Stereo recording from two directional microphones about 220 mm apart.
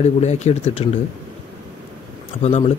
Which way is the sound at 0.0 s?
30° left (ahead or behind).